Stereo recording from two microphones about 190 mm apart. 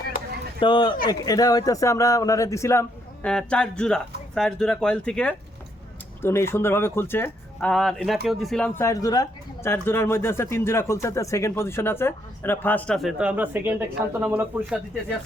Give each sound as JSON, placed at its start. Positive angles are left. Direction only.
{"t": 0.6, "sound": "speech", "side_deg": 25}